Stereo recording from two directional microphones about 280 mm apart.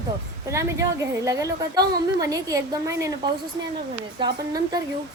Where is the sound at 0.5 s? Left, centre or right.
Centre.